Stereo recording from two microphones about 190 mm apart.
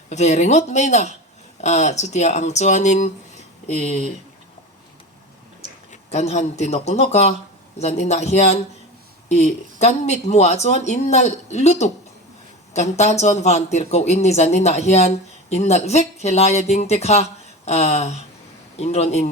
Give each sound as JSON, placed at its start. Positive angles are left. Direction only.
{"t": 0.1, "sound": "speech", "side_deg": 35}
{"t": 5.9, "sound": "speech", "side_deg": 35}